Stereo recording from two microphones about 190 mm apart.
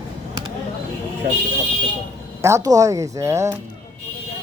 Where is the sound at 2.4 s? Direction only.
15° right (ahead or behind).